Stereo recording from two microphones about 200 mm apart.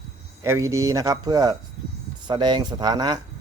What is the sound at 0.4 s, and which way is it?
Speech, 15° right (ahead or behind).